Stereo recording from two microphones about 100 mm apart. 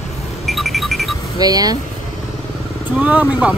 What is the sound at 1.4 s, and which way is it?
Speech, 40° right (ahead or behind).